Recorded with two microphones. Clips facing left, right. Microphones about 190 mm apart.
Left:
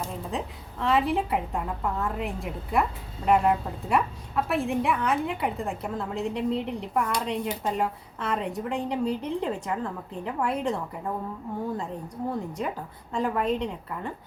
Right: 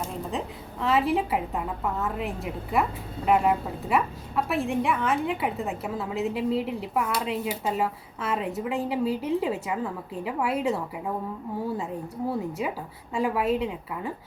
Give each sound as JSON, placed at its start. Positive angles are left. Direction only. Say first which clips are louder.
{"t": 0.0, "sound": "a woman's voice", "louder": "right 1 dB", "side_deg": 0}